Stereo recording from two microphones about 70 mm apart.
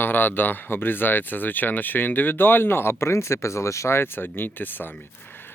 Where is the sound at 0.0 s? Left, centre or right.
Left.